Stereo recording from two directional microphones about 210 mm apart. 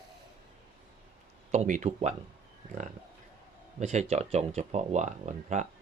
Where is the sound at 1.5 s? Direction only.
35° right (ahead or behind).